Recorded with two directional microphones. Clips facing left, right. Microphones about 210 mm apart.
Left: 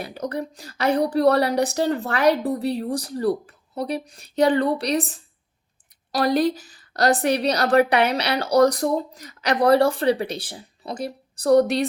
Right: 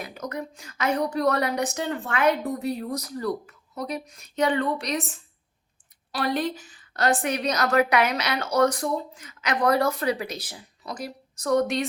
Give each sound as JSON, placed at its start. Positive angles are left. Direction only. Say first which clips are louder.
{"t": 0.0, "sound": "a woman's voice", "louder": "left 5 dB", "side_deg": 30}